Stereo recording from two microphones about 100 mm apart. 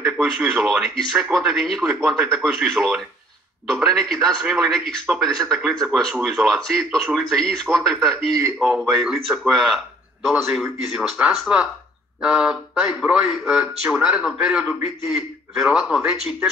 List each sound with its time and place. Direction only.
0.0 s speech: 5° right (ahead or behind)
8.3 s a man's voice: 35° right (ahead or behind)
9.0 s speech: 5° right (ahead or behind)